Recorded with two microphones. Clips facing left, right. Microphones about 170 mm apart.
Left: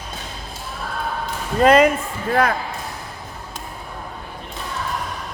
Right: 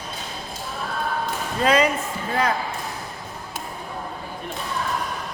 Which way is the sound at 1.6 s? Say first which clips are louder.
Left 6 dB; 55° left (ahead or behind).